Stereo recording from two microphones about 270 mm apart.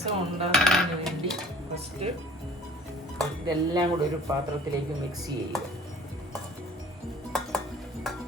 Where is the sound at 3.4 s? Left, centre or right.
Centre.